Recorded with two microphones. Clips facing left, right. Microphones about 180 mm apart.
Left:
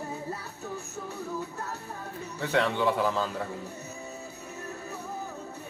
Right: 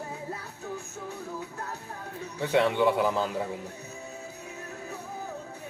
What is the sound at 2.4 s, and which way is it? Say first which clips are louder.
A man's voice: right 3 dB; 15° right (ahead or behind).